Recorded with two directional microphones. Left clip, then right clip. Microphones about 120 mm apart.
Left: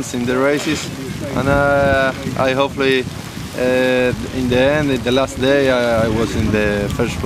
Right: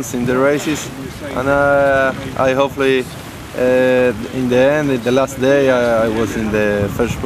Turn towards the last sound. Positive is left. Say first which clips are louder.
# right 2 dB
turn(degrees=0)  # may be behind; listen again after turning